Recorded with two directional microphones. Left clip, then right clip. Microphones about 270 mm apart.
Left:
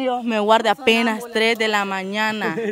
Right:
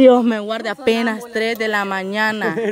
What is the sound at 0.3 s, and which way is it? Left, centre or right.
A woman's voice, centre.